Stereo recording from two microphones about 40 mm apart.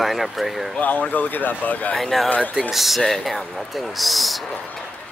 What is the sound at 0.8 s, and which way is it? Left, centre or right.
Speech, left.